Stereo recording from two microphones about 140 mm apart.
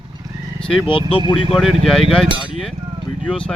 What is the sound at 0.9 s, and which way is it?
Speech, 40° left (ahead or behind).